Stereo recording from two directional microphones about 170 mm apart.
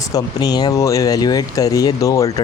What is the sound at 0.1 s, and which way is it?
Speech, 25° left (ahead or behind).